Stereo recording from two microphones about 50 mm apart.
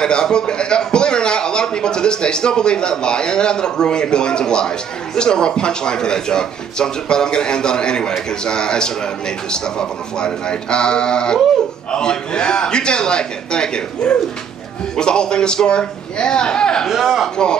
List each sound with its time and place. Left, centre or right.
0.0 s a man's voice: centre
16.9 s speech: centre